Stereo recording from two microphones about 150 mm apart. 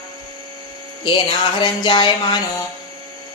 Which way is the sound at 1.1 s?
30° left (ahead or behind).